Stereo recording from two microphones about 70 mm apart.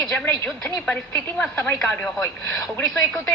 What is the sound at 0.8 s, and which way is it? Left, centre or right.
A woman's voice, left.